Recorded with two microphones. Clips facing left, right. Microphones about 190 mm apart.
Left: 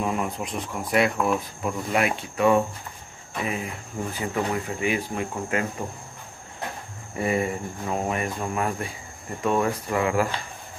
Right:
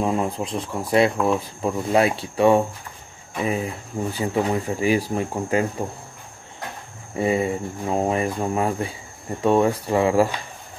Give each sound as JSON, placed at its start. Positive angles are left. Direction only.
{"t": 0.0, "sound": "speech", "side_deg": -30}
{"t": 7.2, "sound": "speech", "side_deg": -25}